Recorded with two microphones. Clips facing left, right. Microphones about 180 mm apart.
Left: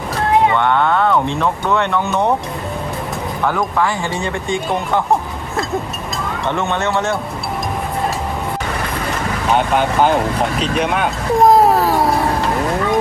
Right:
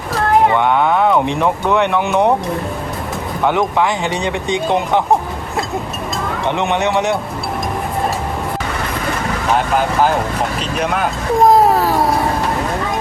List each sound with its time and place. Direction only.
0.5 s speech: 10° right (ahead or behind)
3.4 s speech: 15° right (ahead or behind)
6.5 s speech: 15° right (ahead or behind)
9.6 s speech: centre (ahead or behind)